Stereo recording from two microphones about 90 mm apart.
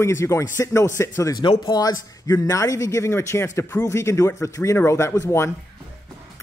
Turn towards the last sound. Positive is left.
turn(degrees=30)  # may be behind; listen again after turning